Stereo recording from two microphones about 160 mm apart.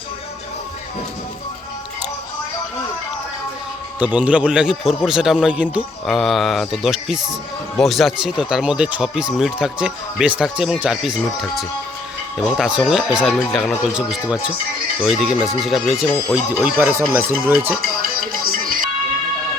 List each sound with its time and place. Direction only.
4.0 s speech: 10° right (ahead or behind)
12.5 s speech: 5° right (ahead or behind)
18.0 s music: 65° right (ahead or behind)